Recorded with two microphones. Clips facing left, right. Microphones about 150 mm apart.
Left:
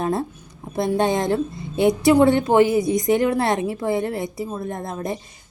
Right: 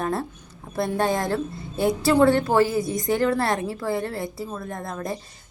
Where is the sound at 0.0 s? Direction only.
20° left (ahead or behind).